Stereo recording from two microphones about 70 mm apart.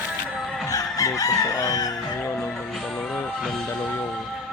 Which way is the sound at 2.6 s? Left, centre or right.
Centre.